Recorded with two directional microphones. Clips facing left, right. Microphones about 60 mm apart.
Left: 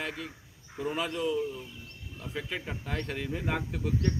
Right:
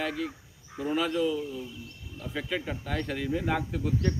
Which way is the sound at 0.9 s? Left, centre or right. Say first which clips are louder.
Right 5 dB; centre.